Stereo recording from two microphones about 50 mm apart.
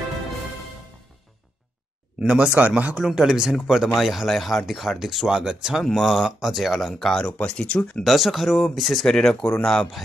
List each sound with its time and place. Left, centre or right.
2.1 s speech: right
3.0 s speech: centre
5.3 s speech: centre
5.9 s speech: centre
7.3 s speech: left
8.0 s speech: centre